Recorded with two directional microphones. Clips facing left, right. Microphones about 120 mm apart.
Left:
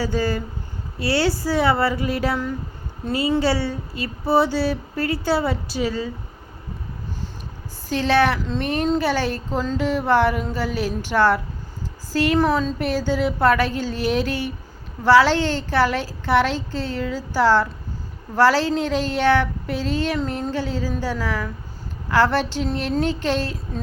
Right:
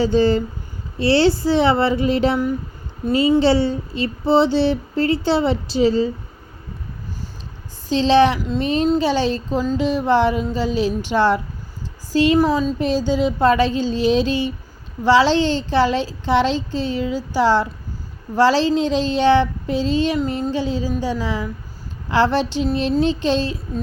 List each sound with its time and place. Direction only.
0.0 s speech: 25° right (ahead or behind)
7.9 s speech: 20° right (ahead or behind)
9.7 s a sound: 20° right (ahead or behind)
10.1 s speech: 20° right (ahead or behind)
20.2 s a sound: 20° right (ahead or behind)
21.0 s speech: 20° right (ahead or behind)